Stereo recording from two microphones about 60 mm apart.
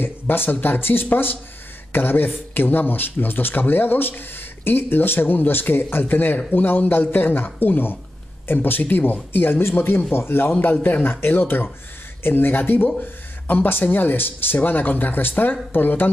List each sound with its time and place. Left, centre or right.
0.0 s speech: left